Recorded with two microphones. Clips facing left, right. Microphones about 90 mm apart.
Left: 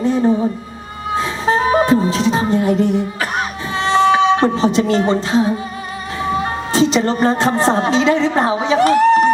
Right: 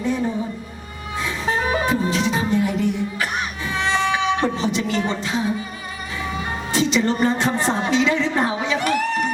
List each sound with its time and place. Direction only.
0.0 s music: 35° left (ahead or behind)
6.2 s speech: 35° left (ahead or behind)